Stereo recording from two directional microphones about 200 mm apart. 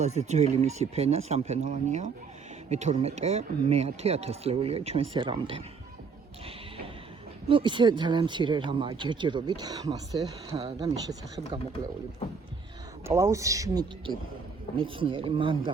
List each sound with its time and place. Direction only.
0.0 s speech: 35° right (ahead or behind)
7.4 s speech: 25° right (ahead or behind)
13.1 s speech: 15° right (ahead or behind)